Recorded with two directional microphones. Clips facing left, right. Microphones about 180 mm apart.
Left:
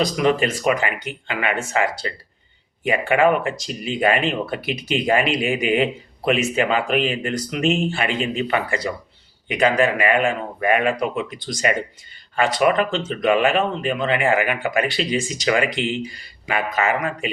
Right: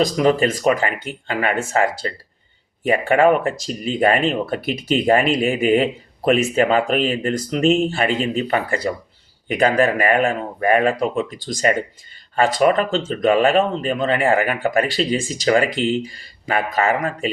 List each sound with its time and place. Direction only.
0.0 s speech: 40° right (ahead or behind)